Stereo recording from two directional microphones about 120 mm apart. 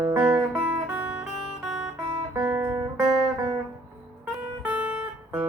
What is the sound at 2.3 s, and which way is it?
Music, 30° right (ahead or behind).